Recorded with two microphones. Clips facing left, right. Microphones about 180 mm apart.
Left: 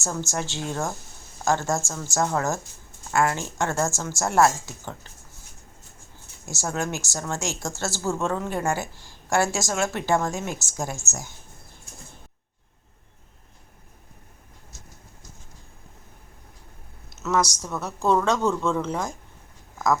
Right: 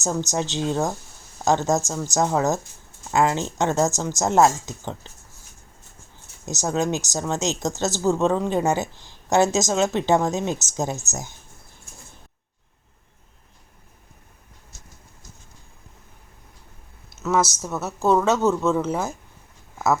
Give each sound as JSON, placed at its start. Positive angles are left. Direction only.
{"t": 0.0, "sound": "speech", "side_deg": -20}
{"t": 6.4, "sound": "speech", "side_deg": -20}
{"t": 17.1, "sound": "speech", "side_deg": 0}